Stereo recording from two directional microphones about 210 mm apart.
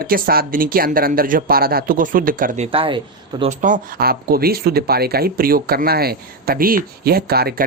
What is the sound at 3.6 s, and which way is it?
Speech, 40° right (ahead or behind).